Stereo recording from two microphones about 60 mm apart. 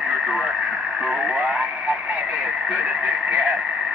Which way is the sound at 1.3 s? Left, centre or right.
Right.